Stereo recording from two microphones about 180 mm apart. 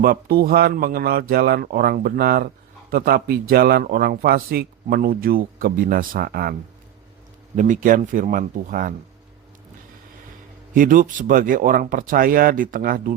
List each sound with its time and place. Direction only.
0.0 s speech: 55° right (ahead or behind)
7.5 s speech: 45° right (ahead or behind)
10.8 s speech: 50° right (ahead or behind)